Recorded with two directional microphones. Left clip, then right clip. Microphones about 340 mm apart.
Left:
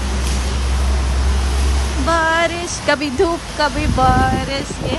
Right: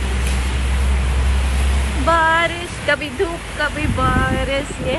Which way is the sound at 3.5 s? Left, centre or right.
Centre.